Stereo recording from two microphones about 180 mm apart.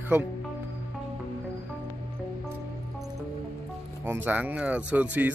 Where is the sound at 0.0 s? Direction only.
10° right (ahead or behind).